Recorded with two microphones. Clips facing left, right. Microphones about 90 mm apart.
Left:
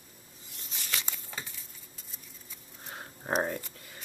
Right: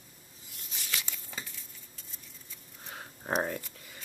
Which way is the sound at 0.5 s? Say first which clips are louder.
Left 1 dB; centre (ahead or behind).